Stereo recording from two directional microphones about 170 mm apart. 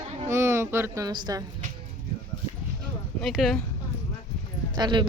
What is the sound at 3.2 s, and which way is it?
Speech, centre (ahead or behind).